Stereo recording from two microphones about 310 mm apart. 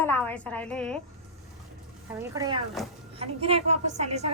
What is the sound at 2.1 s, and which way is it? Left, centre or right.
A woman's voice, centre.